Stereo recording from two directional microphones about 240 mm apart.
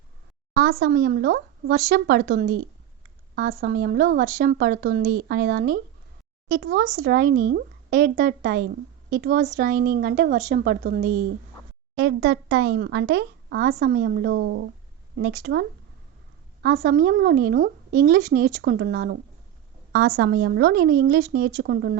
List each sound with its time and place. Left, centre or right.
0.5 s a woman's voice: right
16.6 s a woman's voice: right